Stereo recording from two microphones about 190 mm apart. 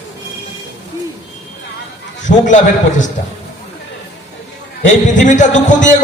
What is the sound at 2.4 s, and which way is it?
Speech, 40° left (ahead or behind).